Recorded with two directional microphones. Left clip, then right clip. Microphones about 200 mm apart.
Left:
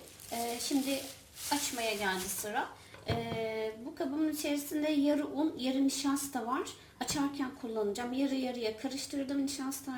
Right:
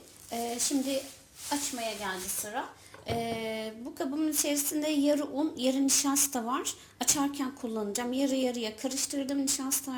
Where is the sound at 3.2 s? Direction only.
25° right (ahead or behind).